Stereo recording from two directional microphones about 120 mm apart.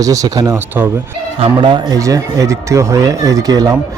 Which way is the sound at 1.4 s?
40° right (ahead or behind).